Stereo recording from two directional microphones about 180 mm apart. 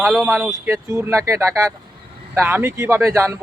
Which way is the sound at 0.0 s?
Centre (ahead or behind).